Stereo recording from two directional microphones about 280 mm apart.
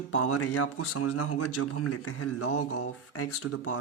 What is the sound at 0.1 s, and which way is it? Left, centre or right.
Speech, left.